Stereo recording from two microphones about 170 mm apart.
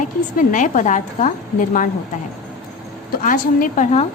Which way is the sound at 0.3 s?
45° left (ahead or behind).